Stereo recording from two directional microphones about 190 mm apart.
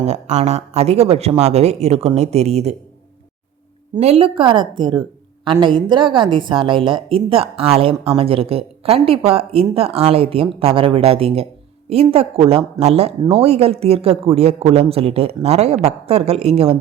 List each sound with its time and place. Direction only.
0.0 s speech: 35° right (ahead or behind)
4.0 s a woman's voice: 30° right (ahead or behind)